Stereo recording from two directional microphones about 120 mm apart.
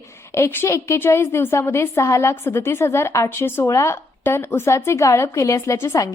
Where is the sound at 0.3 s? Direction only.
25° left (ahead or behind).